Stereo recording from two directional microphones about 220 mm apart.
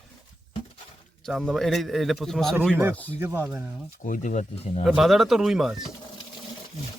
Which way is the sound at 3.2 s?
10° right (ahead or behind).